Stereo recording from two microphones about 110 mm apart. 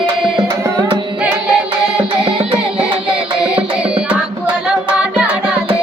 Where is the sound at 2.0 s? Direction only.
55° right (ahead or behind).